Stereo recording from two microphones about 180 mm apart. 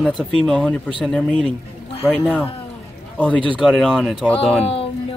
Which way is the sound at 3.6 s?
Centre (ahead or behind).